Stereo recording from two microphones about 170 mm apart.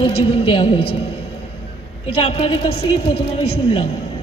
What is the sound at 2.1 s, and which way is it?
A woman's voice, 30° left (ahead or behind).